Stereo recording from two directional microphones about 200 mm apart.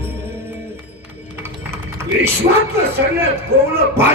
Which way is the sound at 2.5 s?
35° right (ahead or behind).